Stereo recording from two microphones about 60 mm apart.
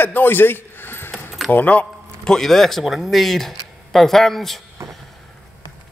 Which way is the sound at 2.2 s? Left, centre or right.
Centre.